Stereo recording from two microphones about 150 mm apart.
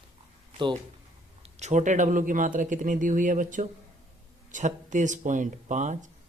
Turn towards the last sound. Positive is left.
turn(degrees=-55)  # may be behind; listen again after turning